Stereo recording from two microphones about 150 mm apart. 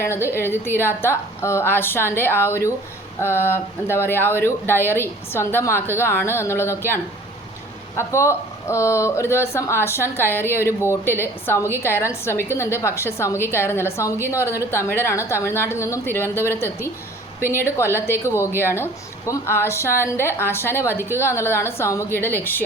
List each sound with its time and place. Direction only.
0.3 s a woman's voice: 15° left (ahead or behind)